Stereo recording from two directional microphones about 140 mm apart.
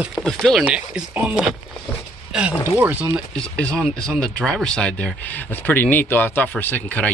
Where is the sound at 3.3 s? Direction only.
5° left (ahead or behind).